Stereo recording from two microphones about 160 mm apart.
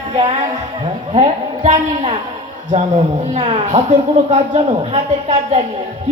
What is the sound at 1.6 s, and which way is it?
Speech, 40° right (ahead or behind).